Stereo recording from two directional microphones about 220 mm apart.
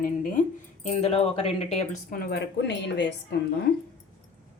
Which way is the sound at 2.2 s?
50° left (ahead or behind).